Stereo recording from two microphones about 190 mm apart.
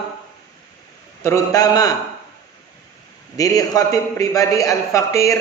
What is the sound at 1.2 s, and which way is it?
Speech, 15° left (ahead or behind).